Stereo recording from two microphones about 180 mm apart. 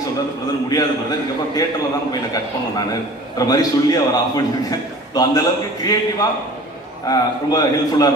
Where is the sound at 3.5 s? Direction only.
20° left (ahead or behind).